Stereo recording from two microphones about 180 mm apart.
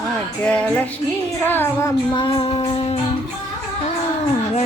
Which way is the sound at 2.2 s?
30° left (ahead or behind).